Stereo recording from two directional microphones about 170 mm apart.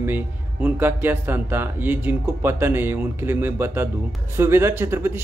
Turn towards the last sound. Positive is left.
turn(degrees=-15)  # may be behind; listen again after turning